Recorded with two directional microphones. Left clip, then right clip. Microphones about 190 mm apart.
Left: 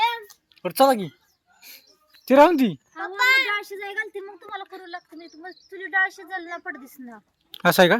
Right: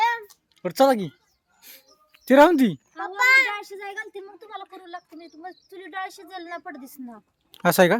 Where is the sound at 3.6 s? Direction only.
60° right (ahead or behind).